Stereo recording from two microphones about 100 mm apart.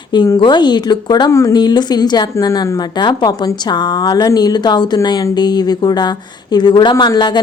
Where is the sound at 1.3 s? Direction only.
35° left (ahead or behind).